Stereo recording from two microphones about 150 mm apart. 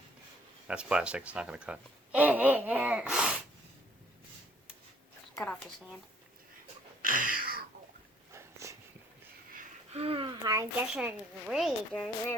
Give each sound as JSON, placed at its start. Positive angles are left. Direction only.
{"t": 0.7, "sound": "speech", "side_deg": -5}
{"t": 7.0, "sound": "a sound", "side_deg": -65}
{"t": 8.3, "sound": "a sound", "side_deg": -20}
{"t": 9.9, "sound": "speech", "side_deg": -40}
{"t": 10.4, "sound": "speech", "side_deg": -20}
{"t": 10.8, "sound": "speech", "side_deg": -10}